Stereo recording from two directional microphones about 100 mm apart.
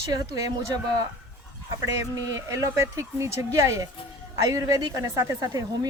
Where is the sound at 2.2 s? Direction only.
35° right (ahead or behind).